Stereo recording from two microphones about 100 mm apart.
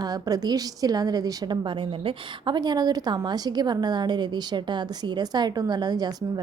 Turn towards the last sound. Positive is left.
turn(degrees=-40)  # may be behind; listen again after turning